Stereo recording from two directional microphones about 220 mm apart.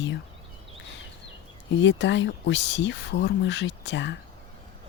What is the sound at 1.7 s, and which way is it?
Speech, 55° left (ahead or behind).